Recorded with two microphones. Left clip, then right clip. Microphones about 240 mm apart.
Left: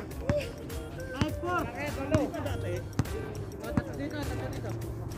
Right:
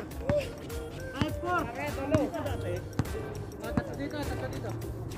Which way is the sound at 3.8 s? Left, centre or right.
Centre.